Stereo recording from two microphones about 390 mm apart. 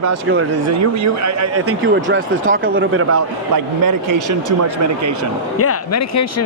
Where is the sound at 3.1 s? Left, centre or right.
Right.